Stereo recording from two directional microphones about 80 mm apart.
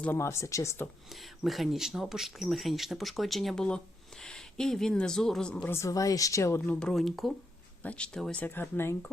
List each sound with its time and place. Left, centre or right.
0.1 s speech: left
1.1 s speech: centre
5.6 s speech: left
6.7 s speech: centre
7.8 s speech: centre